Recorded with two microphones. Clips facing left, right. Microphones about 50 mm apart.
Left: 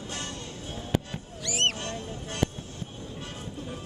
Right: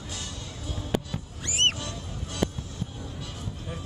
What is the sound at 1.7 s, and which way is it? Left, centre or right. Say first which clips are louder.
Music: left 2 dB; left.